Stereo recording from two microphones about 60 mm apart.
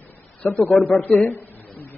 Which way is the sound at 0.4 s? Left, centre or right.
Left.